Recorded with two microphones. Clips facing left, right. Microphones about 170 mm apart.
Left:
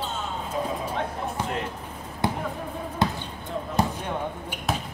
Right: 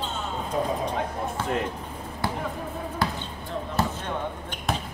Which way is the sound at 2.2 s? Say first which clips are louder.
Left 2 dB; 20° left (ahead or behind).